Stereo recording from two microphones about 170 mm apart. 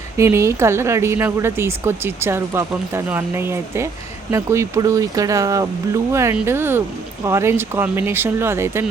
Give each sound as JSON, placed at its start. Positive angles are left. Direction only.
{"t": 0.2, "sound": "speech", "side_deg": -15}